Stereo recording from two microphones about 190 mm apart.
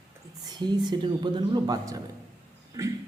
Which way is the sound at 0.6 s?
20° right (ahead or behind).